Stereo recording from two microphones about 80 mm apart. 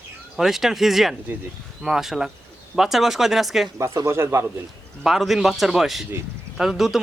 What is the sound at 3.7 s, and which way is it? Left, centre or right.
Speech, right.